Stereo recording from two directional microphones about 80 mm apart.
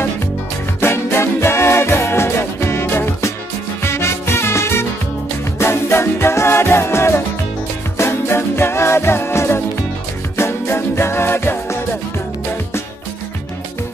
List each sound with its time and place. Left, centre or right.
0.7 s music: left